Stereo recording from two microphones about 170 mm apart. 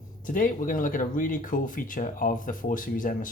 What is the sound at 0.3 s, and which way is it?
Speech, 55° left (ahead or behind).